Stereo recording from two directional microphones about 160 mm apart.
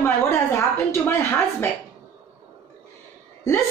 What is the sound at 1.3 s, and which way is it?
Speech, 15° left (ahead or behind).